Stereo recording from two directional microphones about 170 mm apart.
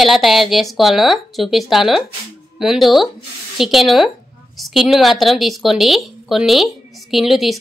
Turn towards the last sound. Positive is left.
turn(degrees=0)  # may be behind; listen again after turning